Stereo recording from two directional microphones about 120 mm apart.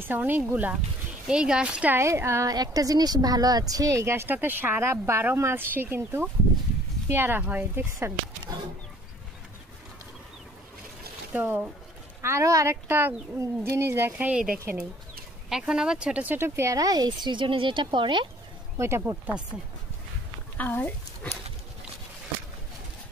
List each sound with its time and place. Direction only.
0.0 s speech: 15° right (ahead or behind)
2.0 s a woman's voice: 20° right (ahead or behind)
11.3 s a woman's voice: 15° right (ahead or behind); by 18.3 s 40° right (ahead or behind)
18.8 s a woman's voice: 20° right (ahead or behind)
20.5 s speech: 15° left (ahead or behind)